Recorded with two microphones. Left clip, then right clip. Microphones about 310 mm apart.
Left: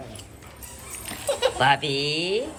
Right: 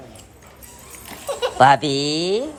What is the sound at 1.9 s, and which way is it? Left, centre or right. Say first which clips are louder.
Speech: right 4 dB; right.